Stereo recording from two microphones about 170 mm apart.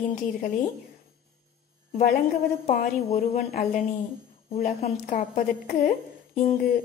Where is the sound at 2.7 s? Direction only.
50° left (ahead or behind).